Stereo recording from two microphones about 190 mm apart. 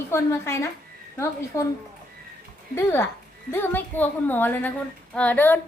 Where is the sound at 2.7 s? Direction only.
15° left (ahead or behind).